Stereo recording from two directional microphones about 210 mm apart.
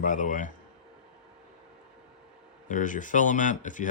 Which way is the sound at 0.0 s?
40° left (ahead or behind).